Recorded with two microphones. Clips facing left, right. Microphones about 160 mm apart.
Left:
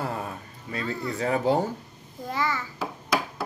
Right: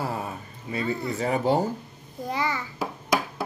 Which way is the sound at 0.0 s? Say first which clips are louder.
Right 1 dB; 5° right (ahead or behind).